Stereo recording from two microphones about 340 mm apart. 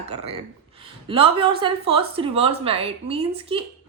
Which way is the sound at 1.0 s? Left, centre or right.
Centre.